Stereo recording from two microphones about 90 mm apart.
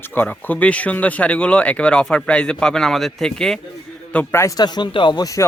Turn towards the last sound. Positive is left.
turn(degrees=40)  # may be behind; listen again after turning